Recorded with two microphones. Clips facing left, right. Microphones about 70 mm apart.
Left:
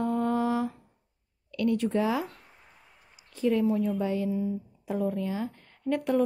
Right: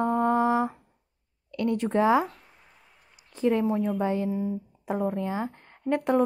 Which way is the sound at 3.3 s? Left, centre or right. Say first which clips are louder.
Right 1 dB; right.